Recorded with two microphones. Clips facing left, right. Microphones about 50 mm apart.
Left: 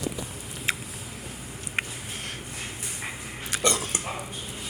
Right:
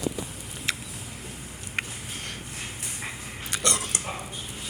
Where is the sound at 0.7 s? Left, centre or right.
Centre.